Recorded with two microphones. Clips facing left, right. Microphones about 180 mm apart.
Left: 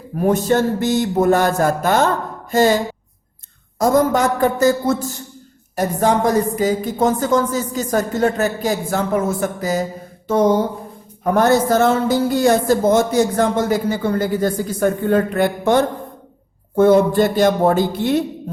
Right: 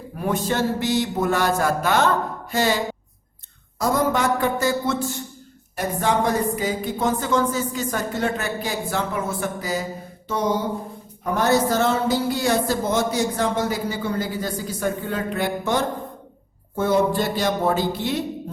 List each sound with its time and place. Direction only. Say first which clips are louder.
0.2 s speech: left 7 dB; 45° left (ahead or behind)
11.2 s speech: left 5 dB; 50° left (ahead or behind)